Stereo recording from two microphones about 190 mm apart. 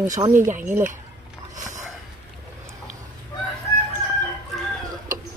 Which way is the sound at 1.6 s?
40° right (ahead or behind).